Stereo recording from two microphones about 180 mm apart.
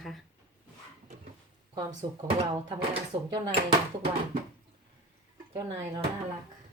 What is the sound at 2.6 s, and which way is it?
Speech, 30° right (ahead or behind).